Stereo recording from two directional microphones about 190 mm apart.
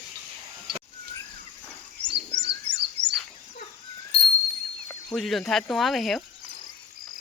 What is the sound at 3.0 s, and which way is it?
Fowl, 60° right (ahead or behind).